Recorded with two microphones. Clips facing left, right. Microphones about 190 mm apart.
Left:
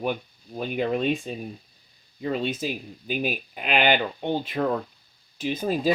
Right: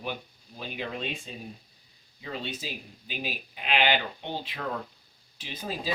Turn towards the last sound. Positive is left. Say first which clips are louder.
# left 11 dB
turn(degrees=50)  # may be behind; listen again after turning